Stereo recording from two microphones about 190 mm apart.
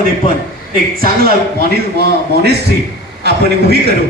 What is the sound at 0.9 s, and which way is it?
Speech, 50° right (ahead or behind).